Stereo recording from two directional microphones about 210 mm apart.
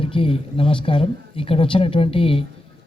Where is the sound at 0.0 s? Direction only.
25° left (ahead or behind).